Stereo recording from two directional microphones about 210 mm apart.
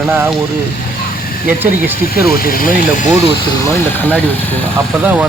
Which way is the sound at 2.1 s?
45° left (ahead or behind).